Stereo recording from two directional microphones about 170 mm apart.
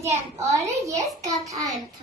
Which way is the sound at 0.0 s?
15° right (ahead or behind).